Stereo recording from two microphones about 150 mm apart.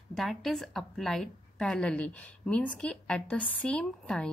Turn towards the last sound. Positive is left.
turn(degrees=5)  # may be behind; listen again after turning